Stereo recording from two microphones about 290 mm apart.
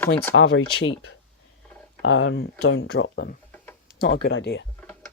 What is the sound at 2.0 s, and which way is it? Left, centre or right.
Speech, left.